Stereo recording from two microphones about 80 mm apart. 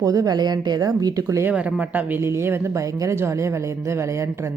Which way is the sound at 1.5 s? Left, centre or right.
Centre.